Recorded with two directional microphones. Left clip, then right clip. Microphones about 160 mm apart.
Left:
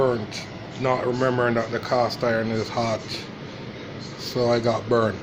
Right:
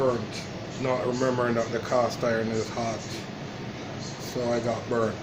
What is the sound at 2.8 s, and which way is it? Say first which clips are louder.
Speech: left 6 dB; 50° left (ahead or behind).